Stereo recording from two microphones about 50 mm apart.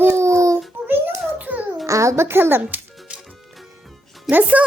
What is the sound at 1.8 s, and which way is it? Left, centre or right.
Speech, right.